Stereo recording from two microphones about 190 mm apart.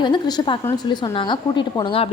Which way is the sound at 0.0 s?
20° left (ahead or behind).